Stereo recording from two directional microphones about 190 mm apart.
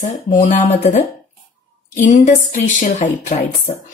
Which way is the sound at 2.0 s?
40° left (ahead or behind).